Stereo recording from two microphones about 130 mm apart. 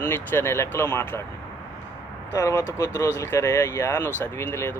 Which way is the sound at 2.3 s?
25° left (ahead or behind).